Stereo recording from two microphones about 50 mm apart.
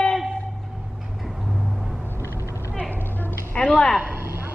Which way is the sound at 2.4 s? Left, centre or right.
Left.